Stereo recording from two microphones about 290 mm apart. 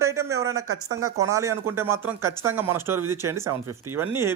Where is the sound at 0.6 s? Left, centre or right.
Right.